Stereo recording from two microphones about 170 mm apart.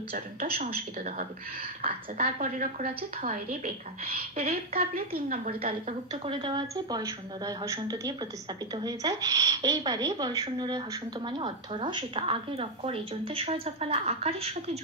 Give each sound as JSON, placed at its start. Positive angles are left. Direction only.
{"t": 0.1, "sound": "a woman's voice", "side_deg": -65}
{"t": 1.8, "sound": "a woman's voice", "side_deg": -35}
{"t": 3.2, "sound": "a woman's voice", "side_deg": -55}
{"t": 5.6, "sound": "a woman's voice", "side_deg": -35}